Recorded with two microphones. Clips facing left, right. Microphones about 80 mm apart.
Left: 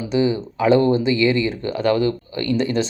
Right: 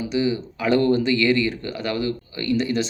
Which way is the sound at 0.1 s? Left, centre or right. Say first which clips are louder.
Left 5 dB; left.